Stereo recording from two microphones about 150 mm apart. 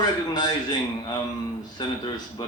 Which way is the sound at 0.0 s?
25° left (ahead or behind).